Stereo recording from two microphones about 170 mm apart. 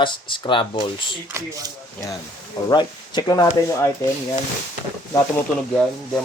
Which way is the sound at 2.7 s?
25° left (ahead or behind).